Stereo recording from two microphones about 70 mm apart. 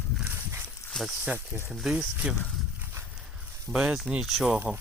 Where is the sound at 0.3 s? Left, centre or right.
Right.